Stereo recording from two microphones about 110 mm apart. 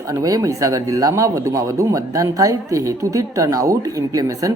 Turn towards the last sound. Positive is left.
turn(degrees=-30)  # may be behind; listen again after turning